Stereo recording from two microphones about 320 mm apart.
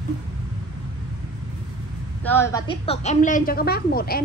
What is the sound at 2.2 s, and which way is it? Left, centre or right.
A woman's voice, centre.